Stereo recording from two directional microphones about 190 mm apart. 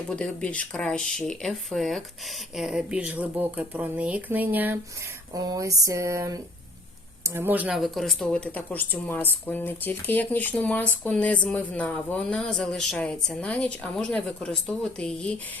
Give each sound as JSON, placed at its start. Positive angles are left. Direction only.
{"t": 0.1, "sound": "speech", "side_deg": 5}